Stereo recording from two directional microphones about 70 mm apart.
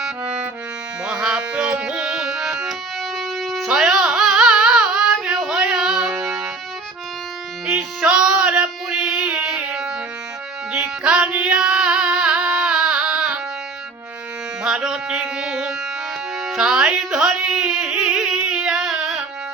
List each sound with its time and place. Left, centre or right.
0.0 s music: centre
6.1 s music: right
7.8 s a sound: centre
10.7 s music: centre
14.6 s music: centre
16.4 s carnatic music: centre
18.3 s a sound: centre
18.9 s music: centre